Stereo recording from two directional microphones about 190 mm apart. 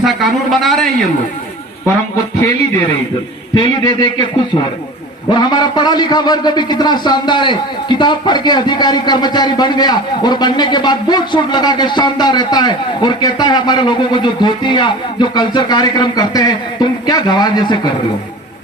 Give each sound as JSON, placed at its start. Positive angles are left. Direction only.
{"t": 0.0, "sound": "a man's voice", "side_deg": 0}
{"t": 3.5, "sound": "a man's voice", "side_deg": 25}
{"t": 5.3, "sound": "a man's voice", "side_deg": 20}